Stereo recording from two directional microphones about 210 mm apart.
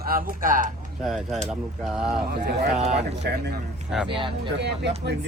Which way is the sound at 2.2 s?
50° right (ahead or behind).